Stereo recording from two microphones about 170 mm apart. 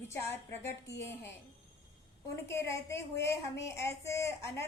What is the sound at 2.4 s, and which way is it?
A woman's voice, 15° left (ahead or behind).